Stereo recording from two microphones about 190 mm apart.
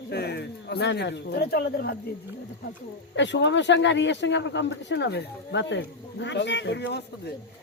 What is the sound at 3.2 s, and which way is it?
Speech, 70° left (ahead or behind).